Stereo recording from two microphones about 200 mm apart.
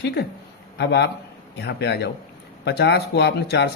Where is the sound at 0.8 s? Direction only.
55° left (ahead or behind).